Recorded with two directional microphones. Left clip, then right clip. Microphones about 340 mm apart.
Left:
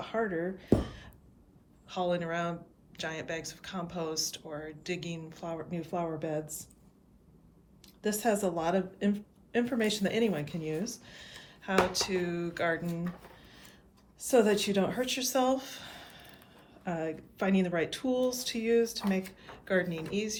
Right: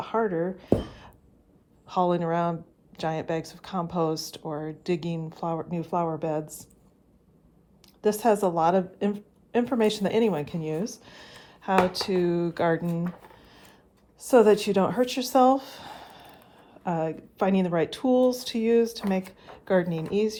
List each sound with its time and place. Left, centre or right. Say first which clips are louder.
0.0 s speech: right 6 dB; centre
8.0 s a woman's voice: right 7 dB; centre